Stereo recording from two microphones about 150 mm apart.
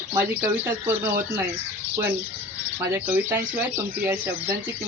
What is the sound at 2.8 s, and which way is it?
Speech, 15° right (ahead or behind).